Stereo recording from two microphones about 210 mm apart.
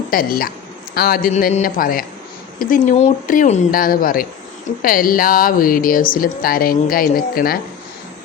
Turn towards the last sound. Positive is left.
turn(degrees=45)  # may be behind; listen again after turning